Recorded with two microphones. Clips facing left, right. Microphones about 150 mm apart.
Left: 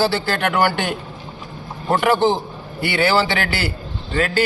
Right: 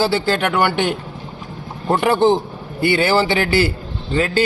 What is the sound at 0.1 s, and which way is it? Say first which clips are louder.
A man's voice: right 3 dB; 20° right (ahead or behind).